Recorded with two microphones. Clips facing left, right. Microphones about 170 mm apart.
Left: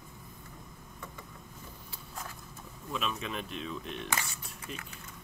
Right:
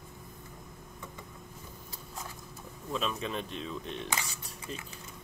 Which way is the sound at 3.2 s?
30° right (ahead or behind).